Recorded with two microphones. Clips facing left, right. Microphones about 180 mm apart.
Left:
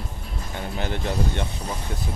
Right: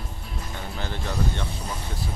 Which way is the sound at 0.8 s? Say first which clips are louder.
Left 3 dB; 20° left (ahead or behind).